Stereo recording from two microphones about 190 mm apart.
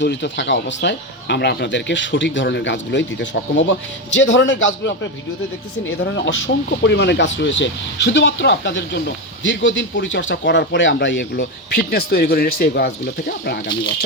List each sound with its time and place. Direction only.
0.0 s speech: 65° left (ahead or behind)
6.1 s speech: 70° left (ahead or behind)